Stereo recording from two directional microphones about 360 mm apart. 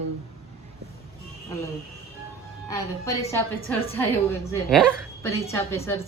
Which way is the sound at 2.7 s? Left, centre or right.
Centre.